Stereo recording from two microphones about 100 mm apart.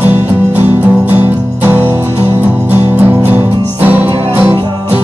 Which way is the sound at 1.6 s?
25° right (ahead or behind).